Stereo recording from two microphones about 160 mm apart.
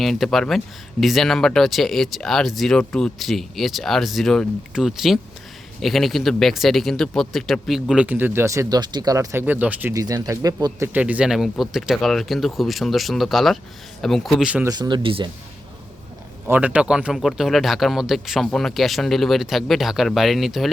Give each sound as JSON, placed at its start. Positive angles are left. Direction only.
{"t": 0.0, "sound": "speech", "side_deg": 0}
{"t": 9.9, "sound": "speech", "side_deg": -20}
{"t": 10.9, "sound": "speech", "side_deg": -10}
{"t": 14.7, "sound": "speech", "side_deg": -25}
{"t": 16.5, "sound": "speech", "side_deg": -10}